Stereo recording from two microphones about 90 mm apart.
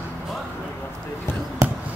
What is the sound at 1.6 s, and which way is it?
Basketball bounce, 35° right (ahead or behind).